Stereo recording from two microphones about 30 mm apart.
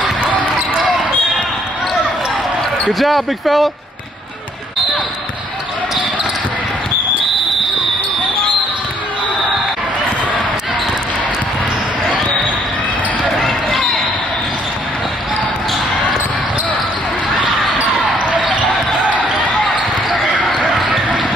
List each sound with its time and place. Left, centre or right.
2.9 s speech: centre
13.4 s basketball bounce: centre
17.7 s basketball bounce: right
20.7 s basketball bounce: centre